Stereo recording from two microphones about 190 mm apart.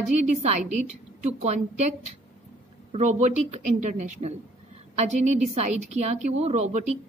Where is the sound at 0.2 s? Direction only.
35° right (ahead or behind).